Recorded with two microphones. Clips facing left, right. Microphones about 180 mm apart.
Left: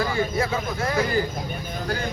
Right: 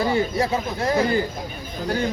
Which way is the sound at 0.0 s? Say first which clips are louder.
Right 3 dB; 30° right (ahead or behind).